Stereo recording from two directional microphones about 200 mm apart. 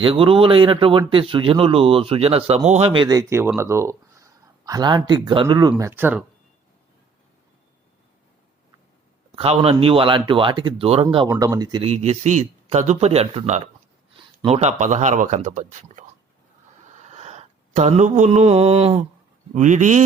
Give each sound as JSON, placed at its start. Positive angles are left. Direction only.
{"t": 0.0, "sound": "a man's voice", "side_deg": -25}
{"t": 9.3, "sound": "a man's voice", "side_deg": -30}
{"t": 17.0, "sound": "a sound", "side_deg": -35}
{"t": 19.5, "sound": "speech", "side_deg": -35}